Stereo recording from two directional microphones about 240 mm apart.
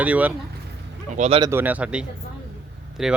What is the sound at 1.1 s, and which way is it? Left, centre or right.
Speech, right.